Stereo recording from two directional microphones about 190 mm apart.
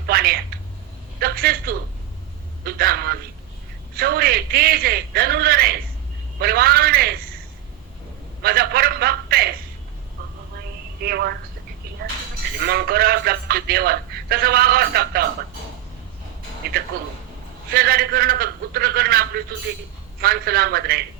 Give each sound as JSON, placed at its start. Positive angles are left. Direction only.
{"t": 0.1, "sound": "a sound", "side_deg": -50}
{"t": 3.9, "sound": "a man's voice", "side_deg": -55}
{"t": 8.4, "sound": "a sound", "side_deg": -55}
{"t": 11.0, "sound": "speech", "side_deg": -55}
{"t": 12.5, "sound": "speech", "side_deg": -55}
{"t": 16.6, "sound": "a man's voice", "side_deg": -55}
{"t": 20.2, "sound": "speech", "side_deg": -55}